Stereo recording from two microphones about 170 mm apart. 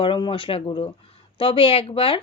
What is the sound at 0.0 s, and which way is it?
Speech, 30° left (ahead or behind).